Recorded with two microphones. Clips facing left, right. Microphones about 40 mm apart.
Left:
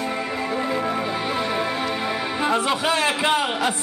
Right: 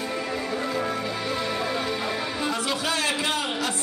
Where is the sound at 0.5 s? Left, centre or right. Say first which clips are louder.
Left 5 dB; left.